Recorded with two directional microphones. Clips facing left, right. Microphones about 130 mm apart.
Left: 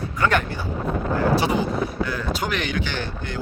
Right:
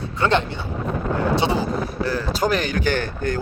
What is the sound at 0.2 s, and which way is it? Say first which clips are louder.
Speech: right 2 dB; 25° right (ahead or behind).